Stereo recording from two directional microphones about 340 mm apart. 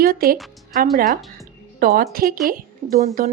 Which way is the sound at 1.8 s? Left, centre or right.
Right.